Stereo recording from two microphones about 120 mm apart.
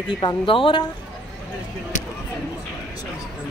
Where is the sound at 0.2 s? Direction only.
40° left (ahead or behind).